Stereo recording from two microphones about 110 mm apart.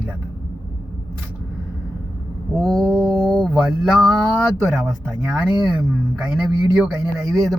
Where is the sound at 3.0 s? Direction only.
10° left (ahead or behind).